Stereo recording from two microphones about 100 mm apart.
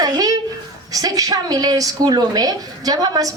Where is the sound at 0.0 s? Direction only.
40° right (ahead or behind).